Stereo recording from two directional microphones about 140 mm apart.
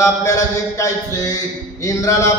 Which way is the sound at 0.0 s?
20° left (ahead or behind).